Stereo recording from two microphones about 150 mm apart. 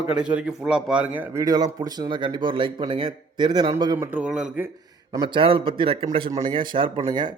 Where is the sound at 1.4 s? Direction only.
25° right (ahead or behind).